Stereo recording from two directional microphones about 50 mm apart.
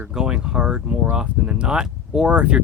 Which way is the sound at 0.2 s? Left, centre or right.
Centre.